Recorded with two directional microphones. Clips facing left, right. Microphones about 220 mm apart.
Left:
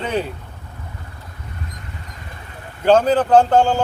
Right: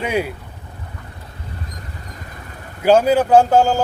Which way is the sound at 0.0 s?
10° right (ahead or behind).